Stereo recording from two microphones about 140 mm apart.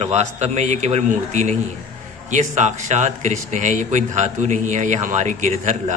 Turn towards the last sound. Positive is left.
turn(degrees=-60)  # may be behind; listen again after turning